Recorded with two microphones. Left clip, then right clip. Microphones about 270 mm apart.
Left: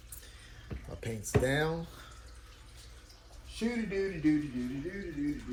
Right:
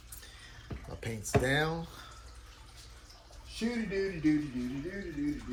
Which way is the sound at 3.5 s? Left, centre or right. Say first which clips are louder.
Even; left.